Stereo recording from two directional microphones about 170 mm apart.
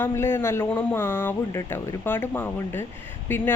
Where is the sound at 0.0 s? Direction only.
15° left (ahead or behind).